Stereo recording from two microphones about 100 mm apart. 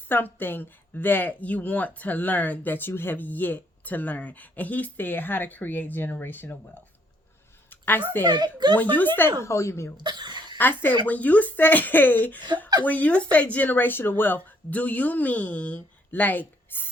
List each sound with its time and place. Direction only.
0.1 s speech: 20° left (ahead or behind)
7.7 s a sound: 20° left (ahead or behind)
8.2 s speech: 45° right (ahead or behind)
8.7 s speech: 15° left (ahead or behind)
9.4 s speech: 30° left (ahead or behind)
10.0 s a sound: 50° right (ahead or behind)
10.6 s speech: 20° left (ahead or behind)